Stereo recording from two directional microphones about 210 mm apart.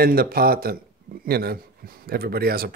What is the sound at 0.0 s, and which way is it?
Speech, 45° right (ahead or behind).